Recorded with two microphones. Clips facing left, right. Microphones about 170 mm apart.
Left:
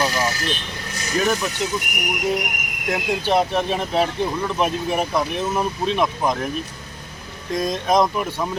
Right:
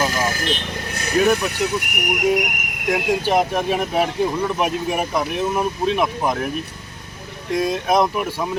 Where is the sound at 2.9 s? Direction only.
10° right (ahead or behind).